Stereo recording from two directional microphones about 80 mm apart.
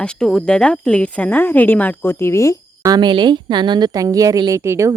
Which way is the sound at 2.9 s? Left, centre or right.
Right.